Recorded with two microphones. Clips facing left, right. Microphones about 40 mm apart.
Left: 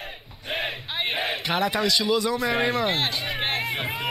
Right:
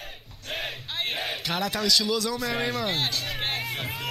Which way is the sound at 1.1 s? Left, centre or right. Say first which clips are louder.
Left 5 dB; centre.